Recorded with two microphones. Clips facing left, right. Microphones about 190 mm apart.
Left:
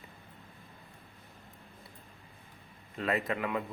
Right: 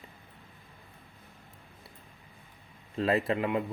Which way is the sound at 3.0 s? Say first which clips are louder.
Right 5 dB; 30° right (ahead or behind).